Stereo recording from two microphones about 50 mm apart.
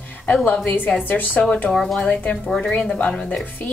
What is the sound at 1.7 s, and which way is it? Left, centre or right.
A woman's voice, centre.